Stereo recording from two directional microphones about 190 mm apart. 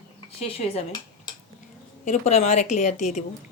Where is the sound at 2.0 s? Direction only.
35° left (ahead or behind).